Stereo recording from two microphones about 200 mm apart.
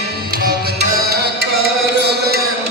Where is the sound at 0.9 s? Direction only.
50° right (ahead or behind).